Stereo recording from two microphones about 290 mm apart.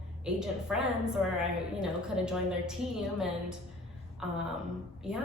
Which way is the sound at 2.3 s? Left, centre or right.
Centre.